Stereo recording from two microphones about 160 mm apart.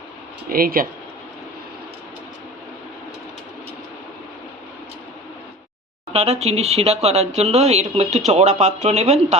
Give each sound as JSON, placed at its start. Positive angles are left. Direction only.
{"t": 0.5, "sound": "speech", "side_deg": -65}
{"t": 6.1, "sound": "speech", "side_deg": -40}